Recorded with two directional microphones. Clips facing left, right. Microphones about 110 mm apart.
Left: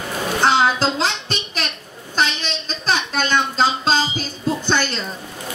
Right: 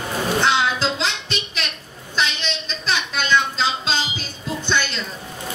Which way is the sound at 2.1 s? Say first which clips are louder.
Left 2 dB; 40° left (ahead or behind).